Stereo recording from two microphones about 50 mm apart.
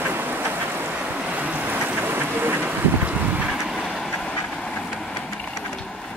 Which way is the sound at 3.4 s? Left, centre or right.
Centre.